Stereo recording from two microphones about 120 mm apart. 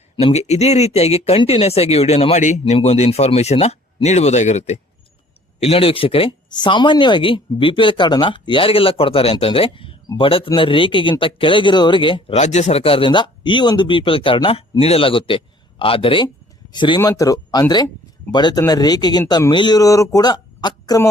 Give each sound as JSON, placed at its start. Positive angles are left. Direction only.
{"t": 0.3, "sound": "speech", "side_deg": 65}
{"t": 2.7, "sound": "speech", "side_deg": 55}
{"t": 5.5, "sound": "speech", "side_deg": 60}
{"t": 12.4, "sound": "speech", "side_deg": 70}
{"t": 17.0, "sound": "speech", "side_deg": 30}